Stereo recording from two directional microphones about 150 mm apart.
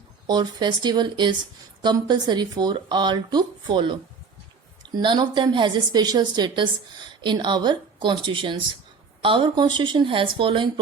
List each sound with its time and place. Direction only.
0.3 s a woman's voice: 30° right (ahead or behind)